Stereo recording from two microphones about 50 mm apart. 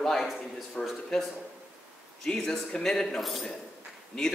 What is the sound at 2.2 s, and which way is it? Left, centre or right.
A man's voice, centre.